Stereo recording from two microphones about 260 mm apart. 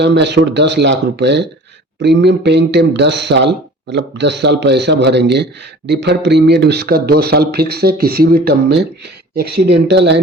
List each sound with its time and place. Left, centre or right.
0.0 s speech: right